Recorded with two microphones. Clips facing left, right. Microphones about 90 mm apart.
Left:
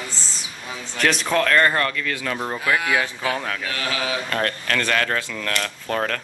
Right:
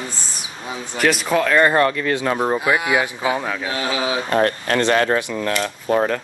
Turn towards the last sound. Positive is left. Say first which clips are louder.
# right 6 dB
turn(degrees=-15)  # may be behind; listen again after turning